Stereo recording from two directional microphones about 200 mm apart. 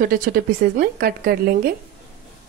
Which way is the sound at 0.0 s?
45° right (ahead or behind).